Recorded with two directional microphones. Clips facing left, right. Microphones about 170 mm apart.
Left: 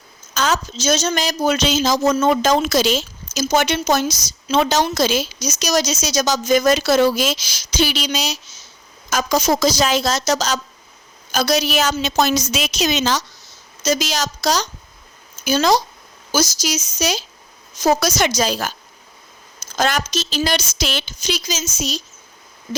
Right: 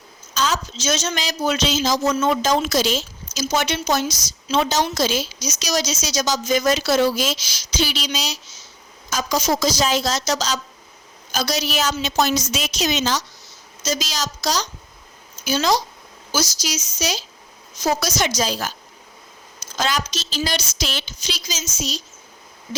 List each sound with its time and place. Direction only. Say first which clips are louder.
0.3 s a woman's voice: left 3 dB; 50° left (ahead or behind)
3.3 s a woman's voice: left 4 dB; 50° left (ahead or behind); by 13.2 s 75° left (ahead or behind)
13.8 s a woman's voice: left 5 dB; 55° left (ahead or behind)
19.7 s a woman's voice: left 4 dB; 50° left (ahead or behind)